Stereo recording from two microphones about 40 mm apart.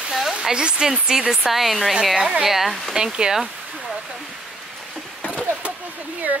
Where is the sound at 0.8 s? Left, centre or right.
Centre.